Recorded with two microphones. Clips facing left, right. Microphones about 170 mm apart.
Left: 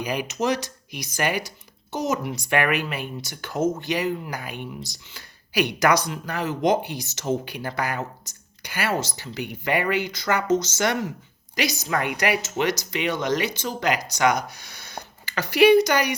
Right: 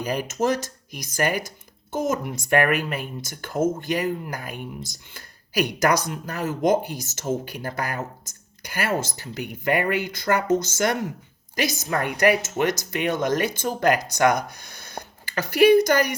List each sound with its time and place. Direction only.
0.0 s speech: 50° right (ahead or behind)